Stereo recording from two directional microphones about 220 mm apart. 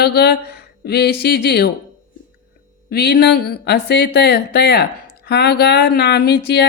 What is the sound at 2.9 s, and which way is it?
Speech, 45° left (ahead or behind).